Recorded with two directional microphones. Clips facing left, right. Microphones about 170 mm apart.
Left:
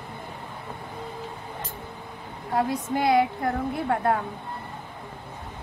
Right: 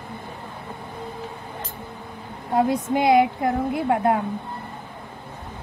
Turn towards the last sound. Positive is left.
turn(degrees=-15)  # may be behind; listen again after turning